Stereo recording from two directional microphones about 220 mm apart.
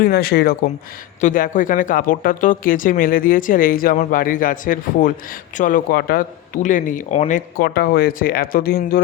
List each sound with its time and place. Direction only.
0.0 s speech: 45° left (ahead or behind)